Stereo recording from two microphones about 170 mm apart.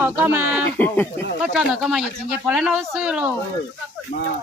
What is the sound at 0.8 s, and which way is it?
Speech, 10° left (ahead or behind).